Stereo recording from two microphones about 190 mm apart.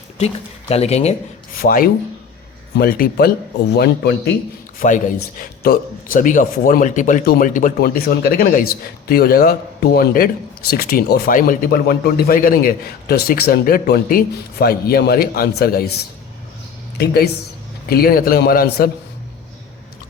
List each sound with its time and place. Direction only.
0.7 s speech: 35° left (ahead or behind)
1.6 s a man's voice: 50° left (ahead or behind)
4.8 s a man's voice: 45° left (ahead or behind)